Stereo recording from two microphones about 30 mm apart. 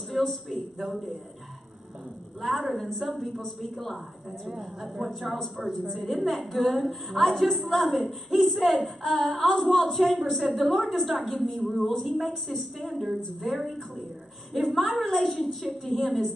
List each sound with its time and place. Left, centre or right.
0.2 s a woman's voice: centre
2.4 s a woman's voice: centre
4.3 s a woman's voice: centre
5.9 s a woman's voice: centre
11.3 s a woman's voice: centre